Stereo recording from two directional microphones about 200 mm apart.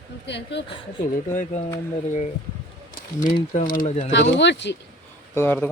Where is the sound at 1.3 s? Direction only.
40° left (ahead or behind).